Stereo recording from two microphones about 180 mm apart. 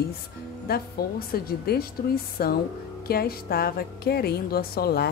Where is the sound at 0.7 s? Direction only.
60° left (ahead or behind).